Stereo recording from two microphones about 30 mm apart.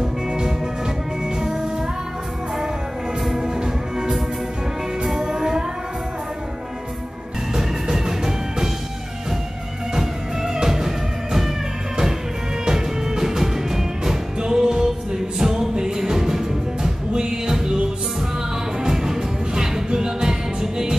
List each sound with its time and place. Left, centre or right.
0.3 s music: right
3.5 s music: right
5.2 s music: centre
7.5 s music: centre
9.9 s music: centre
12.6 s music: centre
18.8 s music: centre